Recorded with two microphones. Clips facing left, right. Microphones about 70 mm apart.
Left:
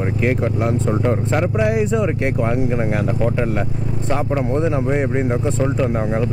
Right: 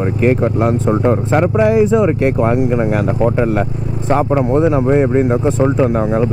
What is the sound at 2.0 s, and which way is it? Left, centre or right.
Speech, right.